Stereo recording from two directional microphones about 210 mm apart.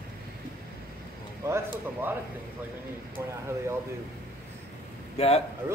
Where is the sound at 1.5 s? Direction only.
10° right (ahead or behind).